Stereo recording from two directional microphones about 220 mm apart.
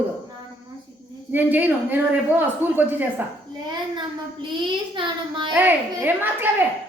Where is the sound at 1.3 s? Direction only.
10° right (ahead or behind).